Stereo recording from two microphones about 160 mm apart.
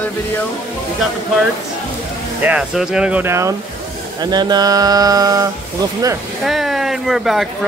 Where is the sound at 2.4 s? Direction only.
5° right (ahead or behind); by 5.5 s 20° right (ahead or behind).